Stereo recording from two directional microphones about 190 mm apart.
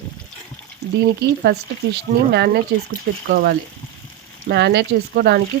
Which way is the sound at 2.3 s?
60° right (ahead or behind).